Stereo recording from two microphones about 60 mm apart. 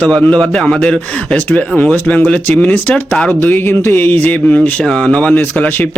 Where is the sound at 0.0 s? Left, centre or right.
Left.